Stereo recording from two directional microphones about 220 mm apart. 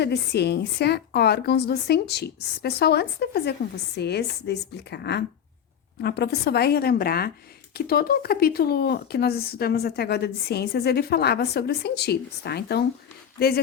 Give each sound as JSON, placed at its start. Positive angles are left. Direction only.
{"t": 0.0, "sound": "speech", "side_deg": 50}